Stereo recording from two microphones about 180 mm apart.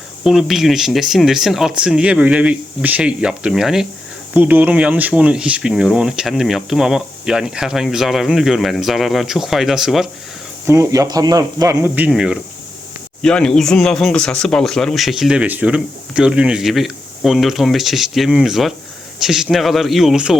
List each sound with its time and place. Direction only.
0.3 s speech: centre (ahead or behind)
10.7 s speech: 15° right (ahead or behind)